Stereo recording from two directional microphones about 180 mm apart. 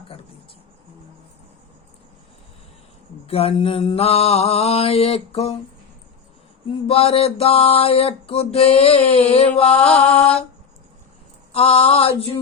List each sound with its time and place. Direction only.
3.2 s mantra: 35° left (ahead or behind)
6.8 s mantra: 35° left (ahead or behind)
11.5 s mantra: 35° left (ahead or behind)